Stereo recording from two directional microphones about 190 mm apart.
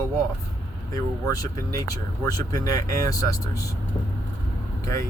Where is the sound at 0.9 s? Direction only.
20° left (ahead or behind).